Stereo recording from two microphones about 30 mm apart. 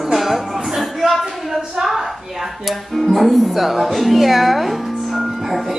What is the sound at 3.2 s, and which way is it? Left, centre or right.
Speech, centre.